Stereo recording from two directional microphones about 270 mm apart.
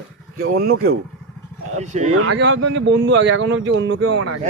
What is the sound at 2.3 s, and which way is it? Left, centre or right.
Speech, right.